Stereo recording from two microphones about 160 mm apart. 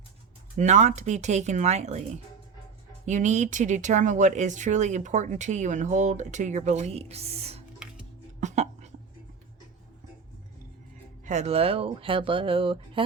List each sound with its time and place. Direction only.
0.5 s speech: 45° right (ahead or behind)
3.1 s speech: 50° right (ahead or behind)
8.4 s a sound: 45° right (ahead or behind)
11.3 s speech: 45° right (ahead or behind)